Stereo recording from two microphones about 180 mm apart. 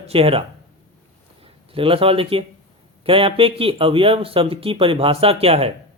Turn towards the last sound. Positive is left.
turn(degrees=-35)  # may be behind; listen again after turning